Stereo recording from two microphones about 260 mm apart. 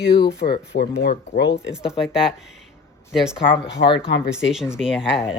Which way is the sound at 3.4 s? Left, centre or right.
Centre.